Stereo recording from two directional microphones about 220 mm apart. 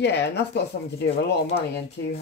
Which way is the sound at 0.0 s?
50° left (ahead or behind).